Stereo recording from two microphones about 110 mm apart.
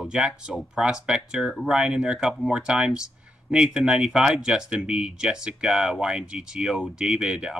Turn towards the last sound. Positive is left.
turn(degrees=-5)  # may be behind; listen again after turning